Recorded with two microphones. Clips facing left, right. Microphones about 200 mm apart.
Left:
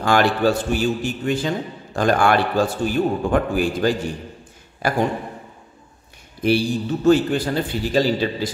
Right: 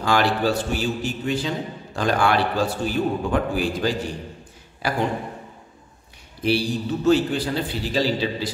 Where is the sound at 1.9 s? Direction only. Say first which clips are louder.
Left 3 dB; 50° left (ahead or behind).